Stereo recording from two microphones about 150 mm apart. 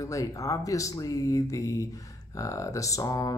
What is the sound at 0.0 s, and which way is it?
Speech, 20° left (ahead or behind).